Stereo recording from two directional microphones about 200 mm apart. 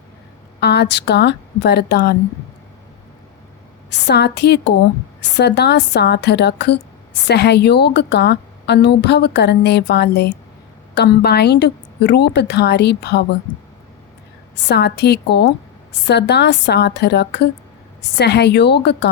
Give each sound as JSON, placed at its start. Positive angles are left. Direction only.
{"t": 0.6, "sound": "a woman's voice", "side_deg": 55}
{"t": 4.0, "sound": "a woman's voice", "side_deg": 55}
{"t": 14.7, "sound": "a woman's voice", "side_deg": 55}